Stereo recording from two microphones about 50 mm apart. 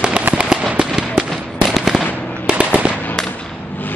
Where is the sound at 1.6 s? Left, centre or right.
Centre.